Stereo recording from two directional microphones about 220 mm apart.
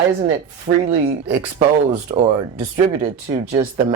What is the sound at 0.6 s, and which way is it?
Speech, 30° right (ahead or behind).